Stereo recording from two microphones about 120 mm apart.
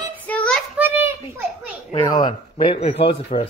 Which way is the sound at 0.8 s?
15° right (ahead or behind).